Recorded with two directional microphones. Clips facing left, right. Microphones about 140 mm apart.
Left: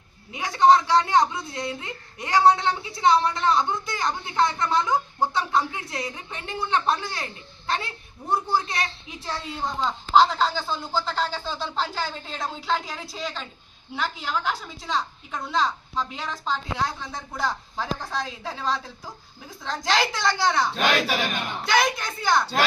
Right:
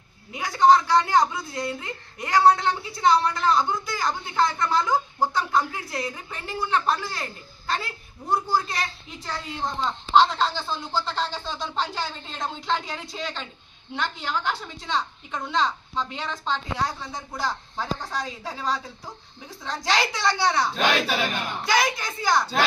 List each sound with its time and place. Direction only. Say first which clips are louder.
0.3 s a woman's voice: even; centre (ahead or behind)
8.3 s a woman's voice: even; centre (ahead or behind)